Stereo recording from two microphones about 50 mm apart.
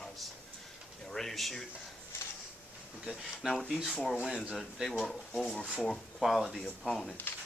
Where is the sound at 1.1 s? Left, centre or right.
Centre.